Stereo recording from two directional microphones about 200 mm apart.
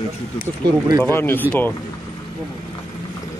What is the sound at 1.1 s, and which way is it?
Speech, 10° left (ahead or behind).